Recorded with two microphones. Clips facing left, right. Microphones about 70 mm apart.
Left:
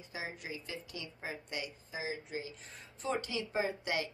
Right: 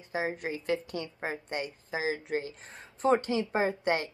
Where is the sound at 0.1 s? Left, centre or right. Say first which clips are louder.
Right 10 dB; right.